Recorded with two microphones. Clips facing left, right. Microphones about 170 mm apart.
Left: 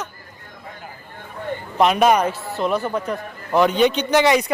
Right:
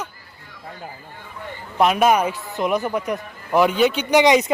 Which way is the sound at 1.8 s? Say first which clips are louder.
Left 1 dB; 5° right (ahead or behind).